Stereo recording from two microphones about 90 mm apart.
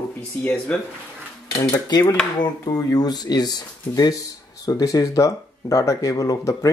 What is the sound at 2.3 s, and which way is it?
Speech, 45° left (ahead or behind).